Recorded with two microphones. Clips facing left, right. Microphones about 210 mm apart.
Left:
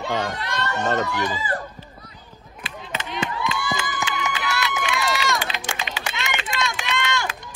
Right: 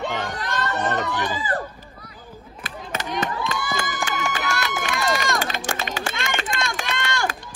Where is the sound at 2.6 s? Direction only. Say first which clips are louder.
Right 1 dB; 45° right (ahead or behind).